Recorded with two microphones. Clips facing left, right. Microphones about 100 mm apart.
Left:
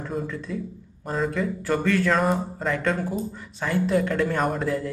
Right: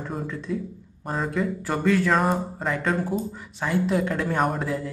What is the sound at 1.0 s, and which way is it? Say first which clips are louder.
Speech: left 1 dB; 5° right (ahead or behind).